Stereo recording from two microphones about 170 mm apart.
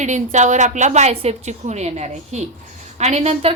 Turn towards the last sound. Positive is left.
turn(degrees=-40)  # may be behind; listen again after turning